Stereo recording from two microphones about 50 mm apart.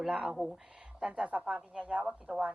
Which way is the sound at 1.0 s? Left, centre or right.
Centre.